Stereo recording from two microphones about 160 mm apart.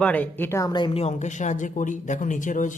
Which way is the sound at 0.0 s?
10° left (ahead or behind).